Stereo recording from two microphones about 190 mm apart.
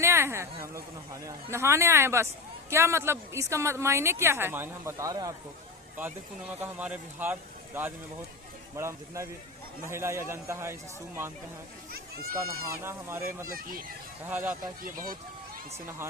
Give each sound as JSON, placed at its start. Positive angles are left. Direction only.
{"t": 0.0, "sound": "a man's voice", "side_deg": -15}
{"t": 12.8, "sound": "a man's voice", "side_deg": -15}
{"t": 13.2, "sound": "speech", "side_deg": -50}
{"t": 14.3, "sound": "a man's voice", "side_deg": -10}
{"t": 14.6, "sound": "speech", "side_deg": -45}